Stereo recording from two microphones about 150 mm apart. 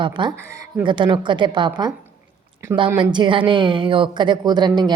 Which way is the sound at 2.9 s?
30° right (ahead or behind).